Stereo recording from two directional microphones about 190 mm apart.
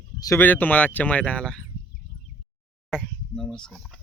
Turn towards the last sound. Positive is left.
turn(degrees=0)  # may be behind; listen again after turning